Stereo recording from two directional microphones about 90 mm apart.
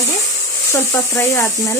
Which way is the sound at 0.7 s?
30° left (ahead or behind).